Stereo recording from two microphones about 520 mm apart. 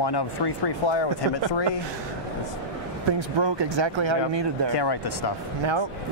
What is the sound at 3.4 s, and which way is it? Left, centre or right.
Speech, right.